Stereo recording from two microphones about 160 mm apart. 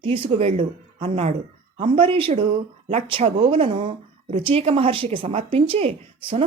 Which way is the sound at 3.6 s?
45° right (ahead or behind).